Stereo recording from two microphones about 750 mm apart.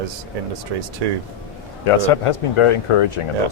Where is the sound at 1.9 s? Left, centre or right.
Left.